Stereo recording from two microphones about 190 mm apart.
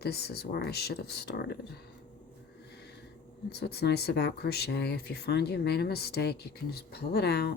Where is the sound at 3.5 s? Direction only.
60° left (ahead or behind).